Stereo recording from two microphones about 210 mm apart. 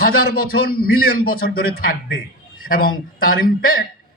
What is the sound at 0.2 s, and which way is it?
Speech, 45° left (ahead or behind).